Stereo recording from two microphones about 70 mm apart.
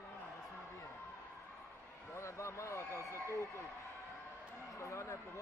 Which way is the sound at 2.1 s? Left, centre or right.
Left.